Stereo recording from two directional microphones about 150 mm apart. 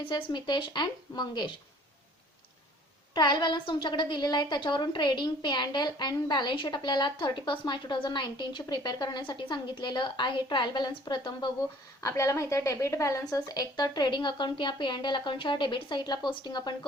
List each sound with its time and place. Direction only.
0.1 s a woman's voice: 30° left (ahead or behind)
3.2 s a woman's voice: 30° left (ahead or behind)
12.0 s a woman's voice: 20° left (ahead or behind)